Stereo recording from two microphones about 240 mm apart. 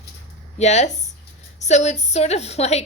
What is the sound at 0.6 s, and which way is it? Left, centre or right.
Speech, left.